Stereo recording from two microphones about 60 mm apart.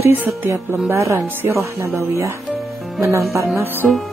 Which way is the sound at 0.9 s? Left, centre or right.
Right.